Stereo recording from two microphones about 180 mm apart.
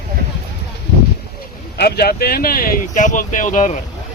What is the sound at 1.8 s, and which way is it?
Speech, 60° left (ahead or behind).